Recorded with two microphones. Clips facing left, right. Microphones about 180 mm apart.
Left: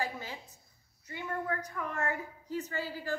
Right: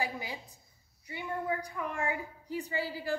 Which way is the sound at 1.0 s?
10° right (ahead or behind).